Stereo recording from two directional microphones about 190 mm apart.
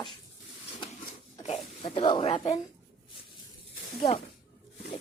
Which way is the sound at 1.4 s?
30° left (ahead or behind).